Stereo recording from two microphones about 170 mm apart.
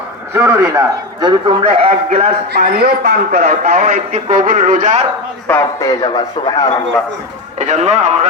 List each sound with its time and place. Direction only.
0.3 s a man's voice: 15° right (ahead or behind); by 2.3 s 40° right (ahead or behind)
2.6 s speech: 60° right (ahead or behind)
3.6 s speech: 45° right (ahead or behind)
5.5 s speech: 15° left (ahead or behind)
7.6 s speech: 40° right (ahead or behind)